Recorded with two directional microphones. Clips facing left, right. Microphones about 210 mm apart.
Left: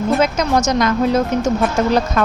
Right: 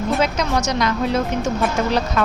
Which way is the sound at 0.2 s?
45° left (ahead or behind).